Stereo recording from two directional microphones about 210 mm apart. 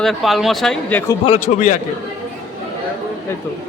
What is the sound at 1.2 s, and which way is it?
Speech, 30° left (ahead or behind).